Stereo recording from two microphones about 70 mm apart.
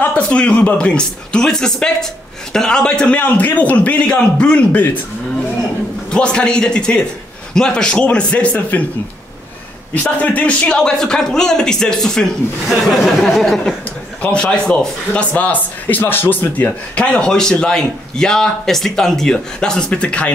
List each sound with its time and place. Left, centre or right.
0.0 s a man's voice: left
6.0 s a man's voice: centre
10.0 s a man's voice: centre
14.2 s speech: centre
16.9 s a man's voice: centre